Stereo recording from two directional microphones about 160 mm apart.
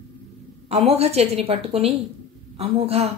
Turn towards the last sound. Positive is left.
turn(degrees=-40)  # may be behind; listen again after turning